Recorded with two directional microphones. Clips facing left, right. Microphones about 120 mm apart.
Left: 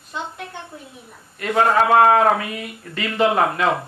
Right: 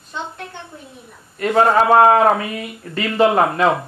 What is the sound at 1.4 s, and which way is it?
Speech, 35° right (ahead or behind).